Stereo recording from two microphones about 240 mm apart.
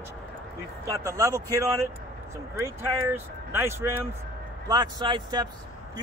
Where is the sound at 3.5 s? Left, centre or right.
Centre.